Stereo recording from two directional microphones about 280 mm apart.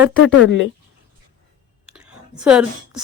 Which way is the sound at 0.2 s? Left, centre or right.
Left.